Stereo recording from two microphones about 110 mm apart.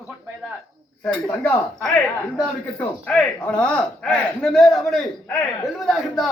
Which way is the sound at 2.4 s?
10° left (ahead or behind).